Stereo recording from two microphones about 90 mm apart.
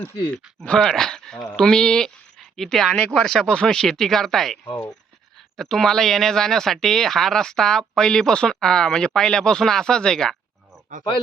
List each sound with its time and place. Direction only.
0.8 s speech: 5° left (ahead or behind)
4.6 s speech: 30° left (ahead or behind)
5.5 s speech: 5° left (ahead or behind)